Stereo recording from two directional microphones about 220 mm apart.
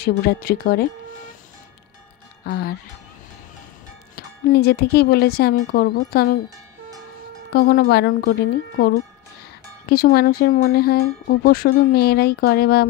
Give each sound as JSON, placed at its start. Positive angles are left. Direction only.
{"t": 0.3, "sound": "speech", "side_deg": 45}
{"t": 2.4, "sound": "speech", "side_deg": 45}
{"t": 4.1, "sound": "speech", "side_deg": 45}
{"t": 7.5, "sound": "speech", "side_deg": 40}